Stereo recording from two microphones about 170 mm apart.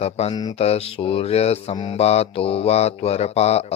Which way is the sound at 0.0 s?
35° left (ahead or behind).